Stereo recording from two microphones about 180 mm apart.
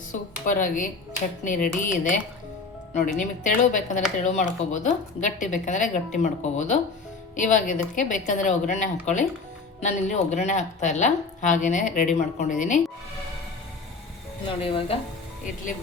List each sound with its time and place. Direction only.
0.1 s a sound: 45° left (ahead or behind)
1.5 s a woman's voice: 45° left (ahead or behind)
14.4 s speech: 30° left (ahead or behind)